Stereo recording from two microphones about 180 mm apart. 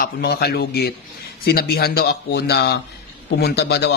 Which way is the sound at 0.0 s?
65° left (ahead or behind).